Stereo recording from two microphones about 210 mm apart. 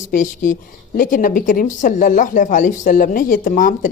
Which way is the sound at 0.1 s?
40° left (ahead or behind).